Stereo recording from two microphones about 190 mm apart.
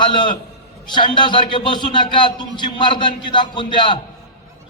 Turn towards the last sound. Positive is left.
turn(degrees=25)  # may be behind; listen again after turning